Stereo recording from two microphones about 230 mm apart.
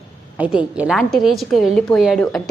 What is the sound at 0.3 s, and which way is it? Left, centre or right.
A woman's voice, centre.